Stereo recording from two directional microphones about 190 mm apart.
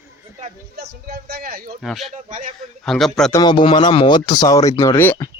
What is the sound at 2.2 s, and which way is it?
Speech, 45° right (ahead or behind).